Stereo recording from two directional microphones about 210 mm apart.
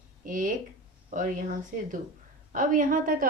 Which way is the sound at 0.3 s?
40° right (ahead or behind).